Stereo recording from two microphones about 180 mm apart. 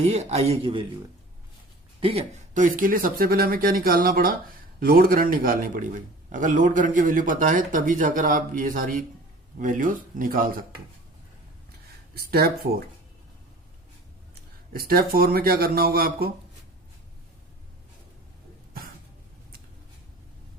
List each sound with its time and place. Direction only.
0.0 s a man's voice: 40° right (ahead or behind)
2.0 s speech: 30° right (ahead or behind)
2.6 s a man's voice: 50° right (ahead or behind)
12.1 s speech: 60° right (ahead or behind)
14.7 s speech: 55° right (ahead or behind)